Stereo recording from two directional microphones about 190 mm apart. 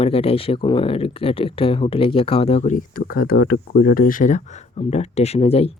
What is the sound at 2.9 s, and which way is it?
Speech, 50° left (ahead or behind).